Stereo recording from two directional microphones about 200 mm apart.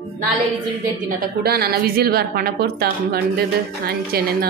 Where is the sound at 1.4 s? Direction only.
50° right (ahead or behind).